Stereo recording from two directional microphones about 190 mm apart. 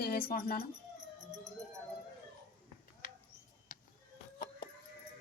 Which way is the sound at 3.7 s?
45° left (ahead or behind).